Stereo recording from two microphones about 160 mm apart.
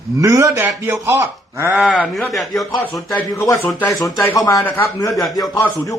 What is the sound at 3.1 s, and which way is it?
Speech, 15° left (ahead or behind).